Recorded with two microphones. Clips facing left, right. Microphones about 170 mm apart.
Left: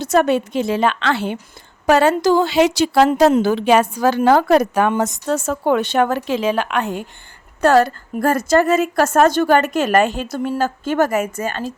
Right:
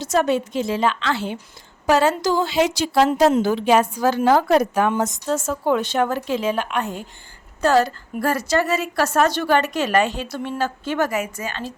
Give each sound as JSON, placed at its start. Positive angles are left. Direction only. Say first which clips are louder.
{"t": 0.0, "sound": "a woman's voice", "louder": "left 4 dB", "side_deg": 60}
{"t": 7.6, "sound": "a woman's voice", "louder": "left 4 dB", "side_deg": 60}